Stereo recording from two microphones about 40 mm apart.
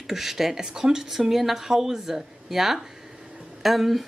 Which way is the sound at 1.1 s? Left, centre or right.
Centre.